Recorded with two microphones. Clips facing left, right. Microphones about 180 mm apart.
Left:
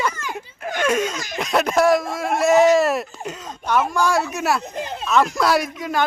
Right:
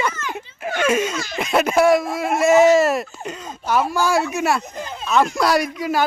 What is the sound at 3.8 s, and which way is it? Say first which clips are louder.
A man's voice: right 1 dB; 5° right (ahead or behind).